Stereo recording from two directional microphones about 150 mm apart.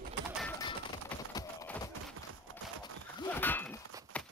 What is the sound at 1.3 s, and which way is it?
Clip-clop, 25° left (ahead or behind).